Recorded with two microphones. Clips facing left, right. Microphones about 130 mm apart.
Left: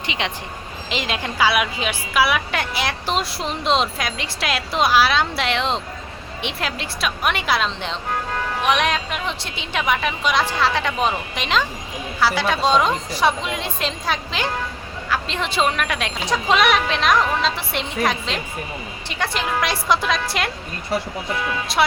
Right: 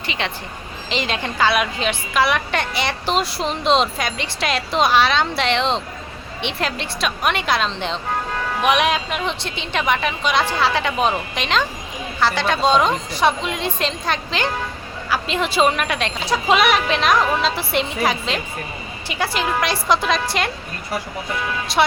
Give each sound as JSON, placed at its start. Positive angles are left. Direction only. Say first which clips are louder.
{"t": 0.2, "sound": "speech", "louder": "even", "side_deg": 15}
{"t": 0.9, "sound": "a woman's voice", "louder": "right 2 dB", "side_deg": 5}
{"t": 21.7, "sound": "a woman's voice", "louder": "right 2 dB", "side_deg": 0}